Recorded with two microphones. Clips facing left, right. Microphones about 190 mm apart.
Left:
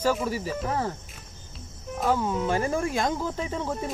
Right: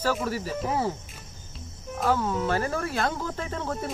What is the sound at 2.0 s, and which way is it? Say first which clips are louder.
Speech: even; 15° left (ahead or behind).